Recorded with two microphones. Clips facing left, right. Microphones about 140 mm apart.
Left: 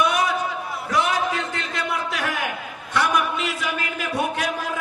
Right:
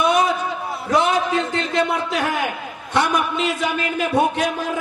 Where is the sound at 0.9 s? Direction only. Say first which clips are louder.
Right 4 dB; 25° right (ahead or behind).